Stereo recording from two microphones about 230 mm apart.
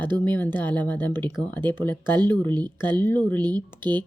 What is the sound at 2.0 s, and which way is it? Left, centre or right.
Speech, centre.